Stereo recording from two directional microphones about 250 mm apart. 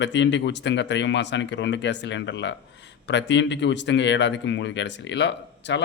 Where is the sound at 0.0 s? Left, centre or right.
Left.